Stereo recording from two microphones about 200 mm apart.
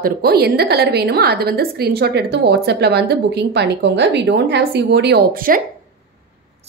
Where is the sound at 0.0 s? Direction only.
50° right (ahead or behind).